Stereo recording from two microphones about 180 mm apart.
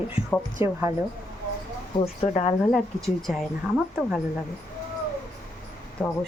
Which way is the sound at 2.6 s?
Centre (ahead or behind).